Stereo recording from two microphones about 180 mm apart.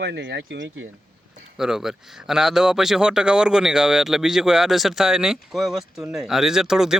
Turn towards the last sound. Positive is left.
turn(degrees=-5)  # may be behind; listen again after turning